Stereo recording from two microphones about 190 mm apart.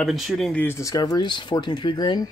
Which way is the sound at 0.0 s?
Centre (ahead or behind).